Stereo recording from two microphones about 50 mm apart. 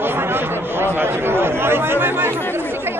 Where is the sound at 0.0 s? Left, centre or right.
Right.